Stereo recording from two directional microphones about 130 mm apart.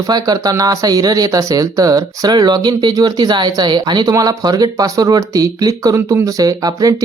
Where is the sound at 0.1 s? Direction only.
30° right (ahead or behind).